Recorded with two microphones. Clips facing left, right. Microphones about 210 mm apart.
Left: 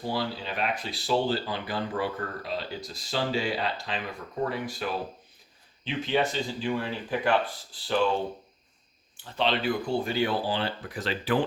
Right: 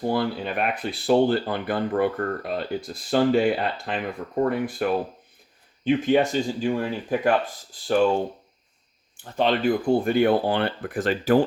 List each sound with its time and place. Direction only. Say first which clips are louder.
0.0 s speech: right 7 dB; 55° right (ahead or behind)
9.4 s speech: right 6 dB; 50° right (ahead or behind)